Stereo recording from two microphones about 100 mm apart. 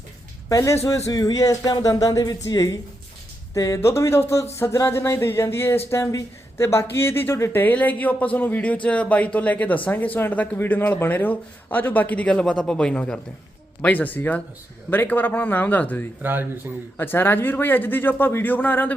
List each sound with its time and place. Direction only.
0.4 s speech: 30° left (ahead or behind)
16.2 s speech: 20° right (ahead or behind)
17.0 s speech: 20° left (ahead or behind)